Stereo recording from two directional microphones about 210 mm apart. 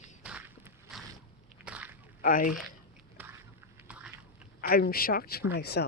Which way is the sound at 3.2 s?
10° right (ahead or behind).